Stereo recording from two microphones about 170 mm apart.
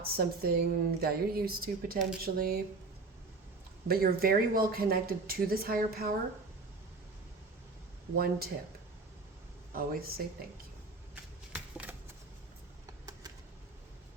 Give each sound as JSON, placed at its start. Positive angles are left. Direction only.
{"t": 0.0, "sound": "speech", "side_deg": -65}
{"t": 3.8, "sound": "speech", "side_deg": -60}
{"t": 8.1, "sound": "speech", "side_deg": -60}
{"t": 9.7, "sound": "speech", "side_deg": -60}
{"t": 11.1, "sound": "shuffling cards", "side_deg": -10}